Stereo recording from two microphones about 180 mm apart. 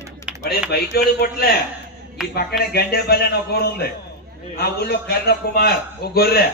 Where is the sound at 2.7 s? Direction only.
60° left (ahead or behind).